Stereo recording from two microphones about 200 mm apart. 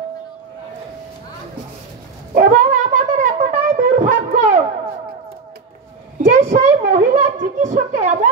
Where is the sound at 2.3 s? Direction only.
45° right (ahead or behind).